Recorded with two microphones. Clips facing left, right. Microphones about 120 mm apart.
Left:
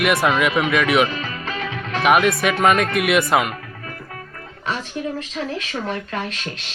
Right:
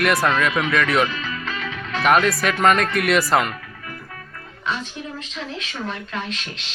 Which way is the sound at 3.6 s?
35° left (ahead or behind).